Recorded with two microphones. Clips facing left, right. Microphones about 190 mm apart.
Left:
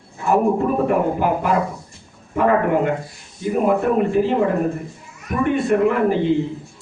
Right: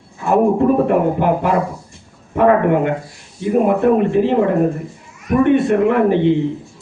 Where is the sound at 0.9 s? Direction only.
60° right (ahead or behind).